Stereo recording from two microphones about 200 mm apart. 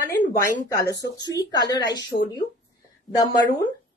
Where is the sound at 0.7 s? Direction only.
15° left (ahead or behind).